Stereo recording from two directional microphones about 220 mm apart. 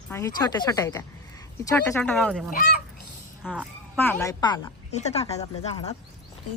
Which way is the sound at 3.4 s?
5° right (ahead or behind).